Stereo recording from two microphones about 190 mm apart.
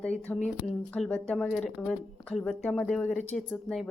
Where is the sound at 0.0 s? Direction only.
5° left (ahead or behind).